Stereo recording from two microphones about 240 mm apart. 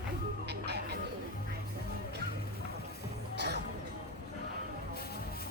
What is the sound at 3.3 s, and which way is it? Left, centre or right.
Music, right.